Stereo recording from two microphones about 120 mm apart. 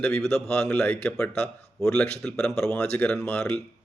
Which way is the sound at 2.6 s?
15° left (ahead or behind).